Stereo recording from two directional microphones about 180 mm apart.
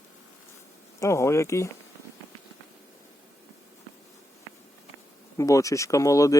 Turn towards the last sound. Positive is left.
turn(degrees=20)  # may be behind; listen again after turning